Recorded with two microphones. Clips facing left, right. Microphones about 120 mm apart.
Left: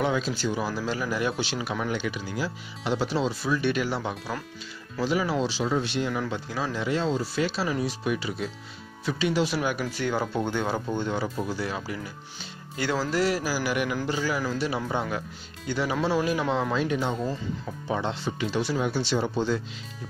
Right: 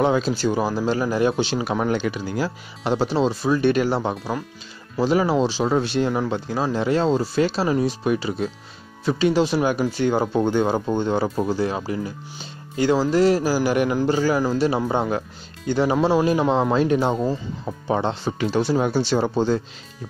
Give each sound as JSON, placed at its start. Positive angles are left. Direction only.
{"t": 0.0, "sound": "speech", "side_deg": -40}
{"t": 1.6, "sound": "speech", "side_deg": -40}
{"t": 7.5, "sound": "speech", "side_deg": -30}
{"t": 12.7, "sound": "speech", "side_deg": -20}